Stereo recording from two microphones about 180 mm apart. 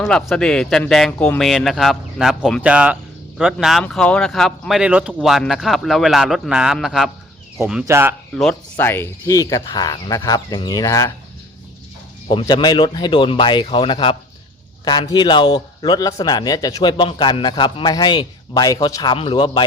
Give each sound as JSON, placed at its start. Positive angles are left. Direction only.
{"t": 0.0, "sound": "speech", "side_deg": 0}
{"t": 8.8, "sound": "a man's voice", "side_deg": 10}
{"t": 12.3, "sound": "a man's voice", "side_deg": 25}